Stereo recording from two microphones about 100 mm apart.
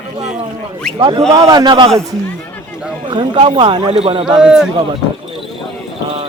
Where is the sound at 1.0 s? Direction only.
50° right (ahead or behind).